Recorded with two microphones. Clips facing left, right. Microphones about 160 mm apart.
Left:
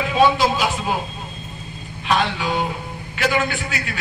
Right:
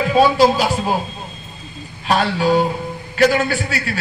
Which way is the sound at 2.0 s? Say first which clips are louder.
Right 4 dB; 40° right (ahead or behind).